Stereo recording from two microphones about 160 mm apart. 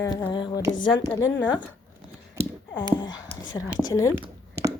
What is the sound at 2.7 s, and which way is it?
A woman's voice, 30° left (ahead or behind).